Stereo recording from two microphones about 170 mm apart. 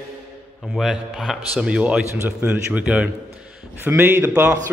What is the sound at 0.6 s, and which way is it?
A man's voice, centre (ahead or behind).